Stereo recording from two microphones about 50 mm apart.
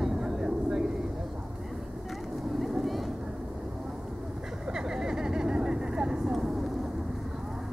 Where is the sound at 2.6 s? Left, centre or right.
Centre.